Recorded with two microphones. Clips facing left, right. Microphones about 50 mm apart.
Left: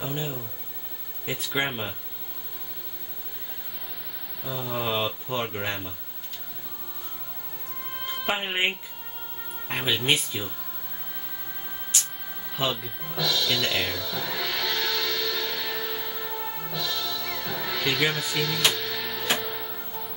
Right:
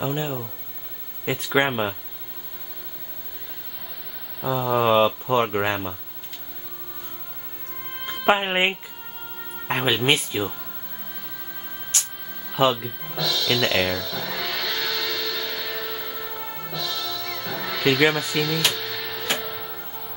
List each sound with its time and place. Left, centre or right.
0.0 s speech: right
4.5 s speech: right
7.9 s music: centre
8.3 s speech: right
12.4 s music: centre